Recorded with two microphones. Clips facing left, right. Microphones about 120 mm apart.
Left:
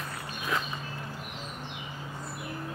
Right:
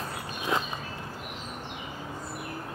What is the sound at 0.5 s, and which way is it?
Walk, 25° right (ahead or behind).